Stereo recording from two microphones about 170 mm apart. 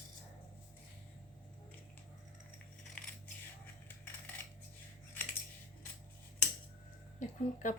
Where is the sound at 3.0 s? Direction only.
10° left (ahead or behind).